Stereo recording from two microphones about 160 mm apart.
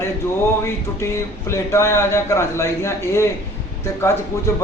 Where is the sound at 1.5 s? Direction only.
15° left (ahead or behind).